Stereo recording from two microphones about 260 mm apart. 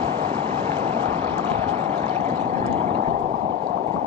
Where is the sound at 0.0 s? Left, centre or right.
Right.